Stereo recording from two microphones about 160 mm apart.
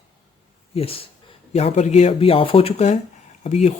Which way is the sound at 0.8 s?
35° left (ahead or behind).